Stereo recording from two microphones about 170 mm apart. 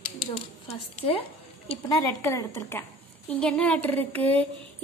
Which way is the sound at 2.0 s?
15° left (ahead or behind).